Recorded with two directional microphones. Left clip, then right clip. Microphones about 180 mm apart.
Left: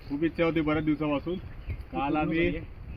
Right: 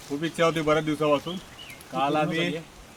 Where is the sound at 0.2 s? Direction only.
20° right (ahead or behind).